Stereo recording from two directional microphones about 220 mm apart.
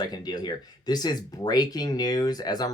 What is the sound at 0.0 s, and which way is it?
Speech, 20° left (ahead or behind).